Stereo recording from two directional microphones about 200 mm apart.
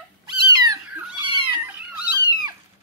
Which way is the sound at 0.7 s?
20° right (ahead or behind).